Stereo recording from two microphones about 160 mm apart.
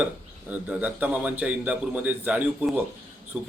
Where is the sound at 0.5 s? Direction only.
10° right (ahead or behind).